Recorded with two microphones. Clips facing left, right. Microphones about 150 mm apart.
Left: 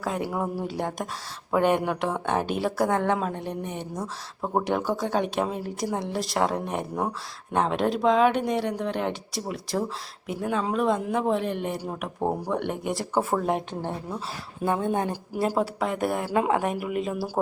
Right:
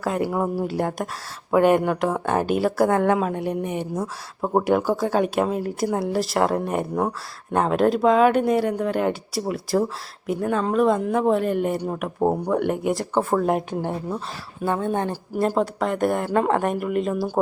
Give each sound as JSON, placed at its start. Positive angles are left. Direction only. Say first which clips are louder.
{"t": 0.0, "sound": "speech", "louder": "right 5 dB", "side_deg": 0}
{"t": 4.4, "sound": "speech", "louder": "right 5 dB", "side_deg": -30}
{"t": 4.9, "sound": "speech", "louder": "right 5 dB", "side_deg": -5}
{"t": 14.6, "sound": "speech", "louder": "right 2 dB", "side_deg": 20}